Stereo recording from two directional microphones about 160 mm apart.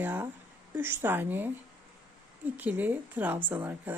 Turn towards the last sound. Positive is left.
turn(degrees=-10)  # may be behind; listen again after turning